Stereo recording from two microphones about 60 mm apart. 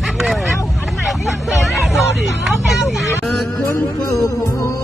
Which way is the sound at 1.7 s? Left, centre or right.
Centre.